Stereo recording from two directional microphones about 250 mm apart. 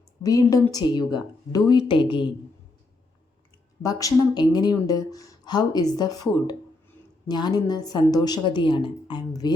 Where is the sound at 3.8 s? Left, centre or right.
Centre.